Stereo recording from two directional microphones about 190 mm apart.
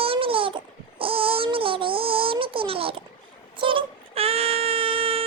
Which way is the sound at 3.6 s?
25° right (ahead or behind).